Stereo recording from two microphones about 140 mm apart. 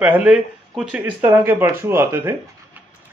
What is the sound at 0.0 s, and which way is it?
Speech, 10° right (ahead or behind).